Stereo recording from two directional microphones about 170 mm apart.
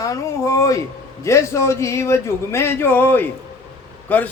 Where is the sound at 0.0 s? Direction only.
20° left (ahead or behind).